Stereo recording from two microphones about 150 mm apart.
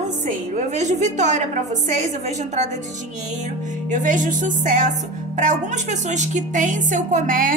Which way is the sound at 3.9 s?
55° right (ahead or behind).